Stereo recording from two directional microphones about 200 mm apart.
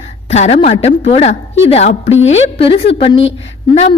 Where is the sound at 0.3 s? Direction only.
35° left (ahead or behind).